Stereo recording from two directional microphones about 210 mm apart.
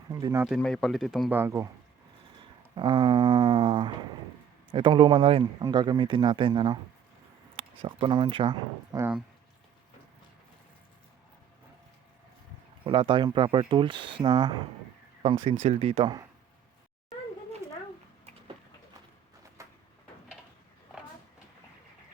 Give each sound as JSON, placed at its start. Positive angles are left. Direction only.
{"t": 0.1, "sound": "speech", "side_deg": -15}
{"t": 0.4, "sound": "speech", "side_deg": 0}
{"t": 1.4, "sound": "speech", "side_deg": -15}
{"t": 2.7, "sound": "speech", "side_deg": -20}
{"t": 12.8, "sound": "speech", "side_deg": -25}
{"t": 19.6, "sound": "bird", "side_deg": -15}